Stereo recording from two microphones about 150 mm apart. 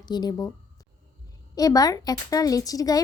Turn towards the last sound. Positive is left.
turn(degrees=25)  # may be behind; listen again after turning